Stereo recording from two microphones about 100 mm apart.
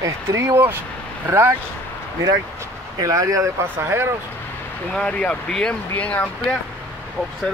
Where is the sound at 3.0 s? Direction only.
35° right (ahead or behind).